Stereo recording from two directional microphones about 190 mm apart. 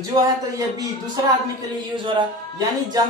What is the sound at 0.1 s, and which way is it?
Speech, 15° right (ahead or behind).